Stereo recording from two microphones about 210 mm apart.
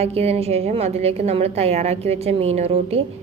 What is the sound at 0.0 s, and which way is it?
A woman's voice, 30° right (ahead or behind).